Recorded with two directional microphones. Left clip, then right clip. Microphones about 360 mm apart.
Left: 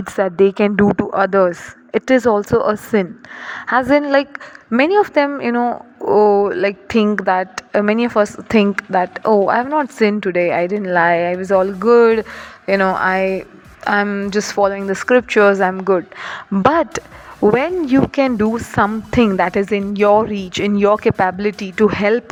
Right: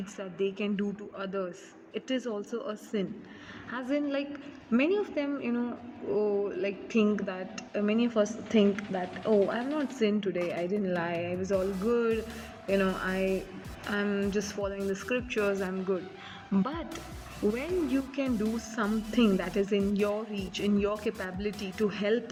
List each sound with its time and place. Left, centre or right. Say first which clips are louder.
0.4 s speech: left 17 dB; left
8.9 s speech: left 15 dB; left
10.0 s speech: left 13 dB; left